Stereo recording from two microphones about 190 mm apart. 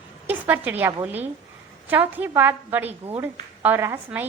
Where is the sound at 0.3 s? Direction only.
10° right (ahead or behind).